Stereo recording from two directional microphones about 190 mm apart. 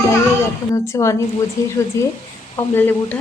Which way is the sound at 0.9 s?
15° left (ahead or behind).